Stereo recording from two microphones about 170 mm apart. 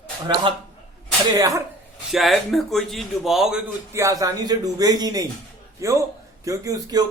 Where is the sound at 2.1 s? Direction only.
Centre (ahead or behind).